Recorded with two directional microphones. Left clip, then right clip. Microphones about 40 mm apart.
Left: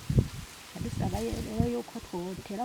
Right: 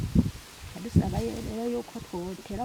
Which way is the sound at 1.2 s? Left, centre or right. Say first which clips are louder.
Right 1 dB; left.